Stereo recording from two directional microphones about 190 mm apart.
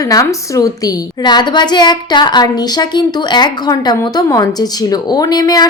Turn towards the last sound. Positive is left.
turn(degrees=20)  # may be behind; listen again after turning